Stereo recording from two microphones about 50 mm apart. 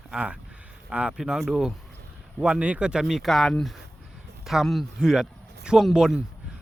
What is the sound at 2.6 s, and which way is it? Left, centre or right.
Speech, right.